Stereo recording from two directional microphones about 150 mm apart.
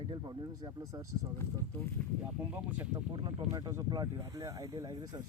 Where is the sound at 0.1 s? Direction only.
30° right (ahead or behind).